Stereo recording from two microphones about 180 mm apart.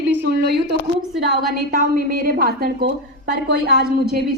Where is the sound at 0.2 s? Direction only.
65° right (ahead or behind).